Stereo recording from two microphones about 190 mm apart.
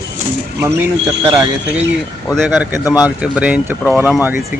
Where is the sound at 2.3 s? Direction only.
Centre (ahead or behind).